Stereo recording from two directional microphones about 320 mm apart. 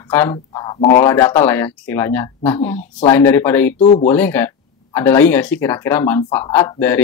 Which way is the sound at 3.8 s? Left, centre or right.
Left.